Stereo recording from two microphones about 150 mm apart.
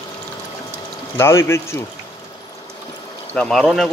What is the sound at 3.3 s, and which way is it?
Speech, 5° left (ahead or behind).